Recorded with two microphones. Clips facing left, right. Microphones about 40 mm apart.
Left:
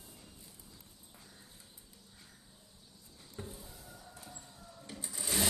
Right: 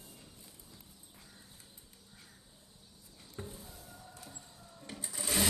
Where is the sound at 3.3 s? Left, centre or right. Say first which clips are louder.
Right 1 dB; centre.